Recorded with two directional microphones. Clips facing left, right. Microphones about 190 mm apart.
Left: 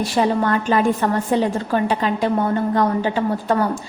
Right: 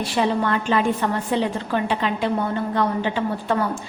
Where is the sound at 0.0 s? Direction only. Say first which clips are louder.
Left 3 dB; 40° left (ahead or behind).